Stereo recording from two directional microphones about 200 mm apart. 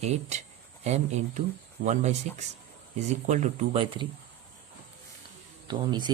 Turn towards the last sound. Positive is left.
turn(degrees=-20)  # may be behind; listen again after turning